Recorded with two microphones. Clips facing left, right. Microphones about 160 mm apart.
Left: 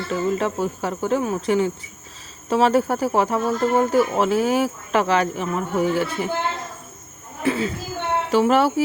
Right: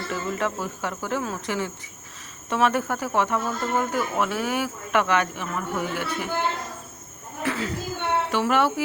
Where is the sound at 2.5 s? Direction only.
30° left (ahead or behind).